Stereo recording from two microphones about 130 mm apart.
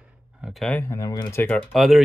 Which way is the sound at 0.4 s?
Centre (ahead or behind).